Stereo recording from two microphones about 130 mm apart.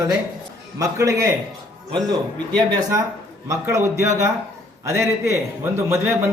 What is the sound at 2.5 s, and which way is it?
Speech, 30° right (ahead or behind).